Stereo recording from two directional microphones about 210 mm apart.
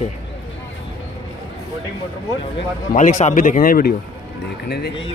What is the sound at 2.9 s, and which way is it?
A man's voice, 35° left (ahead or behind).